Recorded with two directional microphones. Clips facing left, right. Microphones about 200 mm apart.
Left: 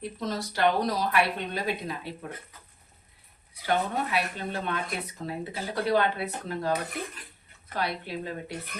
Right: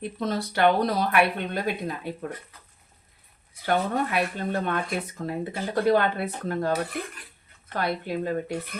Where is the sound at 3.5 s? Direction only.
50° right (ahead or behind).